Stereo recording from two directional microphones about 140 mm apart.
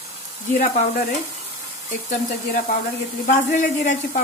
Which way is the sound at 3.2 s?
70° left (ahead or behind).